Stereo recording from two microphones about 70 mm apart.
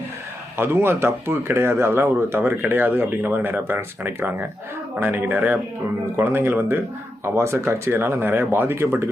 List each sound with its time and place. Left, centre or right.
0.5 s speech: right